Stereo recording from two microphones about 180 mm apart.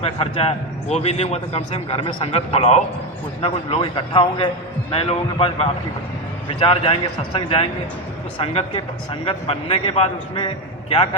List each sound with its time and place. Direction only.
0.0 s a man's voice: 35° left (ahead or behind)